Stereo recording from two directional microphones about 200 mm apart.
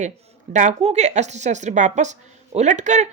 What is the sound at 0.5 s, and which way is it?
Speech, 35° right (ahead or behind).